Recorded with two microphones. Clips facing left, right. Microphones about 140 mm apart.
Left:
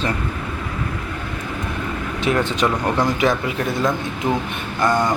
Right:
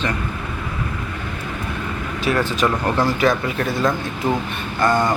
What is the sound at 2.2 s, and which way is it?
Speech, 20° left (ahead or behind).